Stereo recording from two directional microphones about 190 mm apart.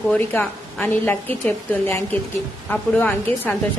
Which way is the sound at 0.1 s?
5° left (ahead or behind).